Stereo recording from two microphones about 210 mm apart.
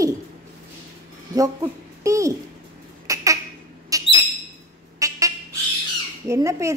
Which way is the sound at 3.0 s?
15° right (ahead or behind).